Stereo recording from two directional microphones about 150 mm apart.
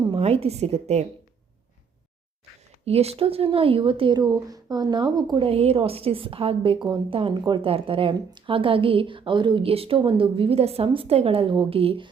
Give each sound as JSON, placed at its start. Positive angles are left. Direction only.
{"t": 0.0, "sound": "a woman's voice", "side_deg": -40}
{"t": 2.8, "sound": "speech", "side_deg": -40}